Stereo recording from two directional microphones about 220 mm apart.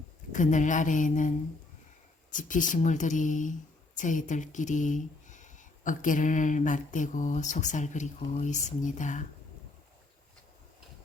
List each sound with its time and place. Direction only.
0.3 s speech: 35° left (ahead or behind)
2.3 s speech: 35° left (ahead or behind)